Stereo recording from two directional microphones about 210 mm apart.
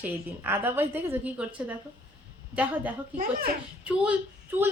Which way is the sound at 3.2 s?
45° right (ahead or behind).